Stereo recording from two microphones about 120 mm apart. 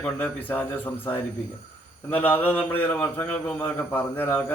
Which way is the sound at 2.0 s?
15° left (ahead or behind).